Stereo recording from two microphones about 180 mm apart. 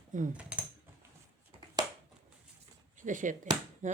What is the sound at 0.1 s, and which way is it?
Speech, 45° right (ahead or behind).